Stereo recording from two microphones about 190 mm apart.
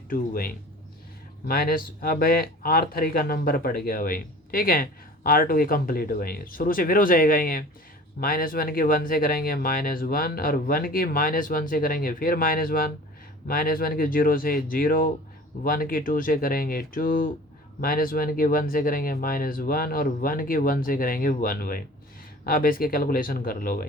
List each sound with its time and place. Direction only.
0.1 s speech: 50° left (ahead or behind)